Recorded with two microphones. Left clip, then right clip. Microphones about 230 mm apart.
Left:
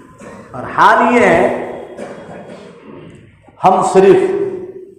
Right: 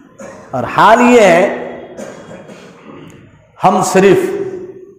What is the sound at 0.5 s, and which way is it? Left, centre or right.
Speech, right.